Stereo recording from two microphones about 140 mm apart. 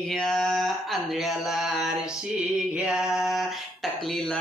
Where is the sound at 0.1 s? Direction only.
5° left (ahead or behind).